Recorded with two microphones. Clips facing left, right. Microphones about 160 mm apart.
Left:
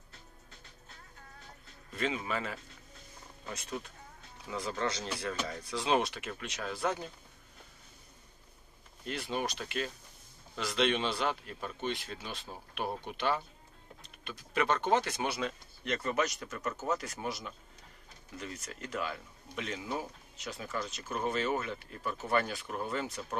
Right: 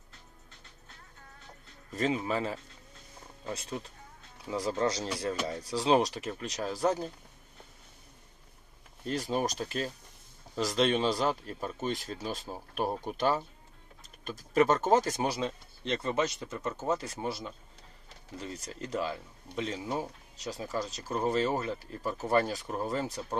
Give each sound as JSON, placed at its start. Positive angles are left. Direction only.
{"t": 1.9, "sound": "speech", "side_deg": -40}
{"t": 9.0, "sound": "speech", "side_deg": -40}